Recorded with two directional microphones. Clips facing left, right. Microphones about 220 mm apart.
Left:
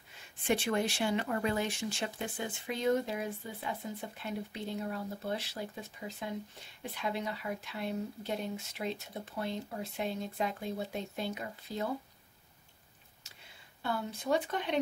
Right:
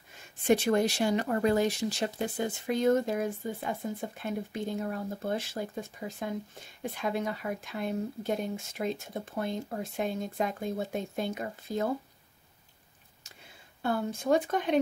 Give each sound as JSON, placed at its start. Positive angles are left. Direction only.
{"t": 0.5, "sound": "speech", "side_deg": -40}
{"t": 13.2, "sound": "a sound", "side_deg": -50}
{"t": 13.8, "sound": "speech", "side_deg": -45}